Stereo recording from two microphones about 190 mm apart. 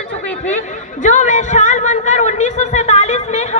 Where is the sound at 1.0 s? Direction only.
40° left (ahead or behind).